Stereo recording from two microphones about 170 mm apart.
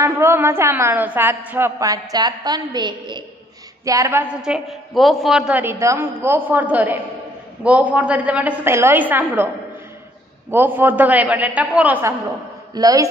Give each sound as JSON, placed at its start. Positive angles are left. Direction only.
{"t": 0.0, "sound": "a woman's voice", "side_deg": -15}
{"t": 10.5, "sound": "a woman's voice", "side_deg": -10}
{"t": 12.7, "sound": "speech", "side_deg": -20}